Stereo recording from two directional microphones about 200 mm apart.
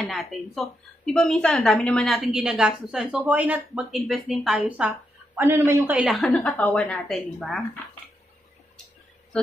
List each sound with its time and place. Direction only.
0.0 s a woman's voice: centre (ahead or behind)
6.1 s a woman's voice: 5° left (ahead or behind)